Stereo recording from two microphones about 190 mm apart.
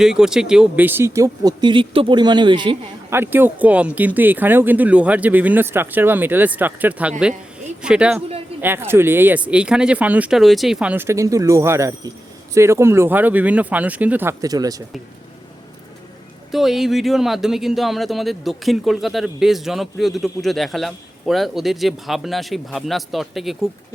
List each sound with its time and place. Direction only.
0.0 s speech: 5° right (ahead or behind); by 2.7 s 25° right (ahead or behind)
3.1 s speech: 10° right (ahead or behind)
16.5 s speech: centre (ahead or behind)